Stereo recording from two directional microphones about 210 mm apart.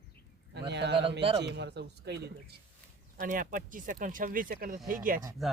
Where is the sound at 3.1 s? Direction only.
40° right (ahead or behind).